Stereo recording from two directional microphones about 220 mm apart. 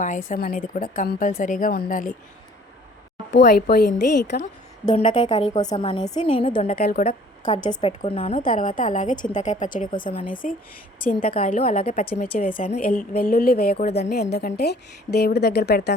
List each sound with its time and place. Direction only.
0.0 s a woman's voice: 35° left (ahead or behind)
3.3 s a woman's voice: 50° left (ahead or behind)
4.9 s a woman's voice: 35° left (ahead or behind)
6.7 s a woman's voice: 45° left (ahead or behind)
7.0 s a woman's voice: 30° left (ahead or behind)
8.4 s a woman's voice: 40° left (ahead or behind)
11.6 s speech: 35° left (ahead or behind)
12.4 s a woman's voice: 40° left (ahead or behind)